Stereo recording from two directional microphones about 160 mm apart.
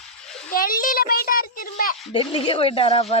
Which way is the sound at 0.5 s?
60° left (ahead or behind).